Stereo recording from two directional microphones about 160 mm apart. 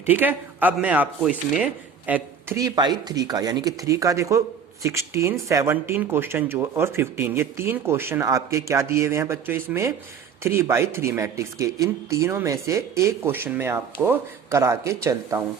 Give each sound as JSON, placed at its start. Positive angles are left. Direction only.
{"t": 0.0, "sound": "speech", "side_deg": -10}
{"t": 2.6, "sound": "speech", "side_deg": -25}